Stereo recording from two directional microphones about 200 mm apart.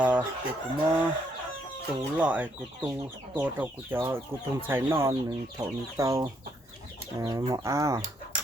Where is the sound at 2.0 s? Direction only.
5° right (ahead or behind).